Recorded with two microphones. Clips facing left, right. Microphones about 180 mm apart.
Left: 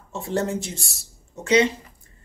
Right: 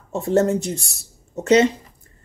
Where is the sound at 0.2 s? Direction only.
40° right (ahead or behind).